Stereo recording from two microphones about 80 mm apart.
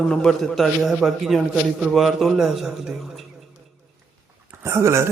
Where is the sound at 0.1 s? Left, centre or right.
Centre.